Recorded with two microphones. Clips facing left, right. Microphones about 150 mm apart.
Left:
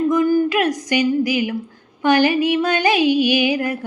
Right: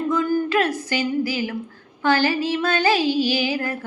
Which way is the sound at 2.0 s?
15° left (ahead or behind).